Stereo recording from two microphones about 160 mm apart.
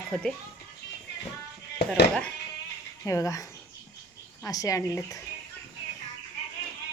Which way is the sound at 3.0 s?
20° left (ahead or behind).